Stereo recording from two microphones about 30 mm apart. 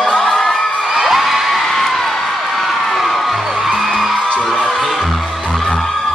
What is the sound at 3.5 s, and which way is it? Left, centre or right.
Music, centre.